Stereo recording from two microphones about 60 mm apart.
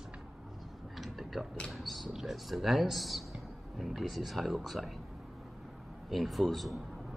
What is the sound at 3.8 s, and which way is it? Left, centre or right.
Speech, centre.